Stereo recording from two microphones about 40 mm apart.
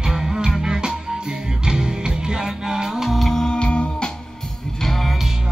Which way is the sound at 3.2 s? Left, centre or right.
Centre.